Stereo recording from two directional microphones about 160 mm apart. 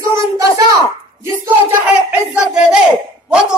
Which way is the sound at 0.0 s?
20° right (ahead or behind).